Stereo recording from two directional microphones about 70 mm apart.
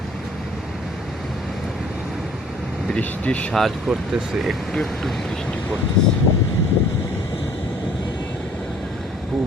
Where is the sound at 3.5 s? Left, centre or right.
Centre.